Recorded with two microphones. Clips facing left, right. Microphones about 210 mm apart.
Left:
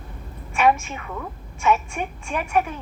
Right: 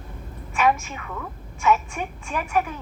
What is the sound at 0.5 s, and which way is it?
A woman's voice, 25° left (ahead or behind).